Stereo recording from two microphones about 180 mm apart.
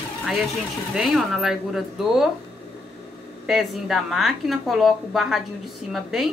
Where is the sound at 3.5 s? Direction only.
Centre (ahead or behind).